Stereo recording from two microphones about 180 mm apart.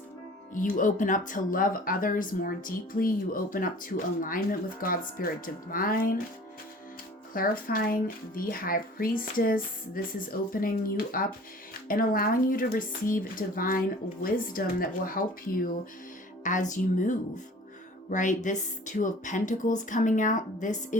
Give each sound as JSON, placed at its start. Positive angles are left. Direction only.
{"t": 0.5, "sound": "speech", "side_deg": 45}
{"t": 7.3, "sound": "speech", "side_deg": 50}
{"t": 16.4, "sound": "speech", "side_deg": 45}